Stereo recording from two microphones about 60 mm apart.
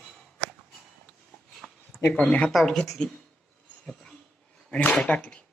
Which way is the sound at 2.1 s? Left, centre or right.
Centre.